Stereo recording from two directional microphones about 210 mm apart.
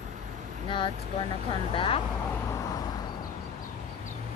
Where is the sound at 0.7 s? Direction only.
25° left (ahead or behind).